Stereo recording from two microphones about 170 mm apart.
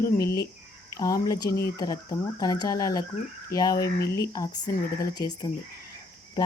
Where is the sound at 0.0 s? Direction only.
20° left (ahead or behind).